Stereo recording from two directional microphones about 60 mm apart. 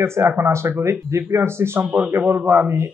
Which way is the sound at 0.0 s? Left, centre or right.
Right.